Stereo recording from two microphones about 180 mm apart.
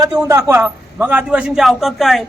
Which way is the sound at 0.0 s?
15° right (ahead or behind).